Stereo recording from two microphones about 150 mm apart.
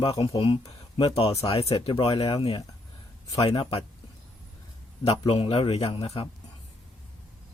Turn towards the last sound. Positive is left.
turn(degrees=40)  # may be behind; listen again after turning